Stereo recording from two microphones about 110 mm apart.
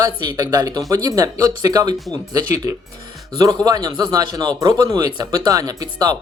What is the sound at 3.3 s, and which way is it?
A man's voice, 35° right (ahead or behind).